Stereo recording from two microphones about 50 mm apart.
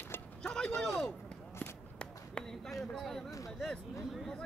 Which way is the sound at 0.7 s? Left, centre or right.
Centre.